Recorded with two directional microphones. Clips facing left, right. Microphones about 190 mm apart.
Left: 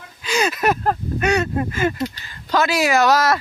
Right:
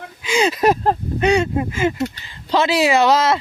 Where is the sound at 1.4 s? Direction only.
10° right (ahead or behind).